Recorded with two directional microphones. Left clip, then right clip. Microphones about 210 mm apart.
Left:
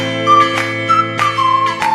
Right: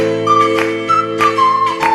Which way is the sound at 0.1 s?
Centre (ahead or behind).